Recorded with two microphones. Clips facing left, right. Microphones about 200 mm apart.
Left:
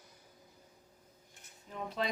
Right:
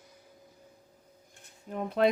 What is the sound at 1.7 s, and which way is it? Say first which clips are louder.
Speech: right 9 dB; 55° right (ahead or behind).